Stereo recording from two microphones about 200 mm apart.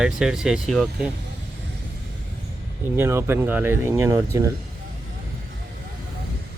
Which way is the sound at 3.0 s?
10° right (ahead or behind).